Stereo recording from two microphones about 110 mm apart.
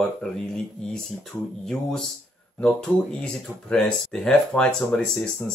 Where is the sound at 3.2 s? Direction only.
10° left (ahead or behind).